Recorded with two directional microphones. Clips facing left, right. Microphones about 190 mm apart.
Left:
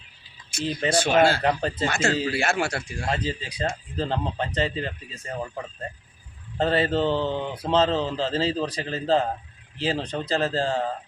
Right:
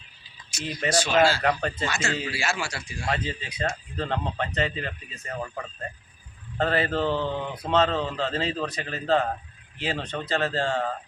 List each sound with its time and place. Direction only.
0.6 s speech: 30° left (ahead or behind)
0.9 s a man's voice: 55° left (ahead or behind)
1.4 s speech: 30° left (ahead or behind)
1.9 s a man's voice: 55° left (ahead or behind)
3.1 s speech: 35° left (ahead or behind)
6.6 s speech: 30° left (ahead or behind)